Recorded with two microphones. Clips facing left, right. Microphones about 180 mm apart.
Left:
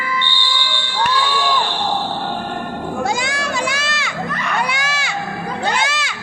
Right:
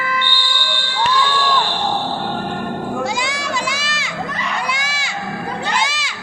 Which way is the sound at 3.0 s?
50° left (ahead or behind).